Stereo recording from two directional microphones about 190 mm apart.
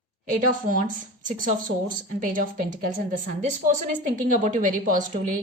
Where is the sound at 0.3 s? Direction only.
45° right (ahead or behind).